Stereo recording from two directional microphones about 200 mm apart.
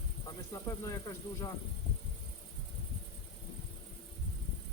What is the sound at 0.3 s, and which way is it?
Speech, 15° left (ahead or behind).